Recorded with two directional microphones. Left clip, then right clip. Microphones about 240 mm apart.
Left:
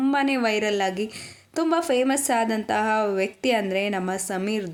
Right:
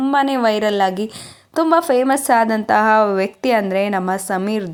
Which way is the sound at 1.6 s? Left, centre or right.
Centre.